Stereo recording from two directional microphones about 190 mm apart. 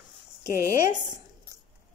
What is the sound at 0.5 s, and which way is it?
Speech, 15° right (ahead or behind).